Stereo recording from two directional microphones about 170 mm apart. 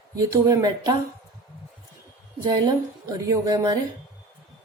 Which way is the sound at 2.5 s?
25° right (ahead or behind).